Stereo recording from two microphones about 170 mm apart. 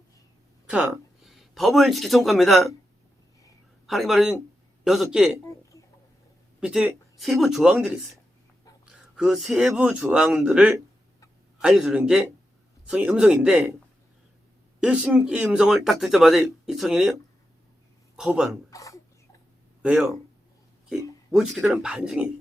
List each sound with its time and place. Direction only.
0.7 s speech: 5° right (ahead or behind)
3.8 s a man's voice: centre (ahead or behind)
6.6 s speech: 5° right (ahead or behind)
14.8 s speech: 5° right (ahead or behind)
18.2 s speech: 5° right (ahead or behind)
18.7 s a sound: 20° left (ahead or behind)
19.8 s speech: 5° right (ahead or behind)